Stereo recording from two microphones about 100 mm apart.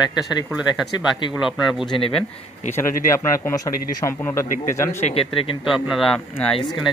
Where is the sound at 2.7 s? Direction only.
25° left (ahead or behind).